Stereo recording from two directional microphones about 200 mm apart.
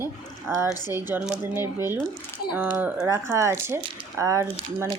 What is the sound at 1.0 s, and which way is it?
Speech, 10° right (ahead or behind).